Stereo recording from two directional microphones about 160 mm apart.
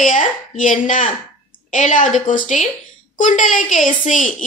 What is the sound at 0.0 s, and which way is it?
Speech, 55° left (ahead or behind).